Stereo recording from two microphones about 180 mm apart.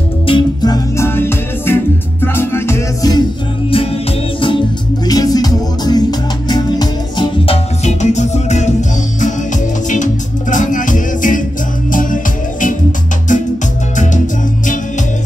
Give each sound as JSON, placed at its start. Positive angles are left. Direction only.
{"t": 0.3, "sound": "music", "side_deg": 20}
{"t": 4.4, "sound": "music", "side_deg": 25}
{"t": 7.8, "sound": "music", "side_deg": 40}
{"t": 10.5, "sound": "music", "side_deg": 45}
{"t": 13.3, "sound": "music", "side_deg": 45}